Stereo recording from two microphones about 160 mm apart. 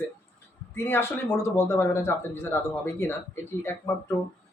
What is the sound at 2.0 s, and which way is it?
Speech, 15° left (ahead or behind).